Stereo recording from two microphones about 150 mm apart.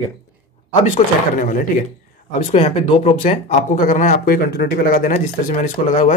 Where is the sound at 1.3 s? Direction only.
65° left (ahead or behind).